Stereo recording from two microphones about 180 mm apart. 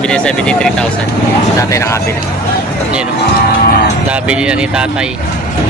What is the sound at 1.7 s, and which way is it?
Speech, 15° left (ahead or behind).